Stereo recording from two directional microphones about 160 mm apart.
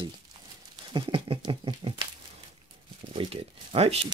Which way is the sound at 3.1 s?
35° right (ahead or behind).